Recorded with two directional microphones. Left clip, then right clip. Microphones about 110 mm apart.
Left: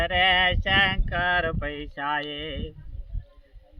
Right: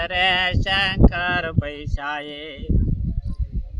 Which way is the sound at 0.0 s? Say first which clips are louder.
Right 1 dB; 50° right (ahead or behind).